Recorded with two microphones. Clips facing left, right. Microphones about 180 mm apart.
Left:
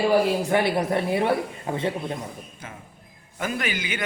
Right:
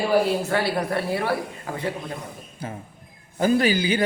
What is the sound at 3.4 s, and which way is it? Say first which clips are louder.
Speech: right 9 dB; 35° right (ahead or behind).